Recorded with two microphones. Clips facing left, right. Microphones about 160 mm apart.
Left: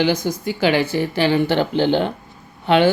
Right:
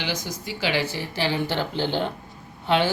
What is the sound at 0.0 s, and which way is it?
Speech, 55° left (ahead or behind).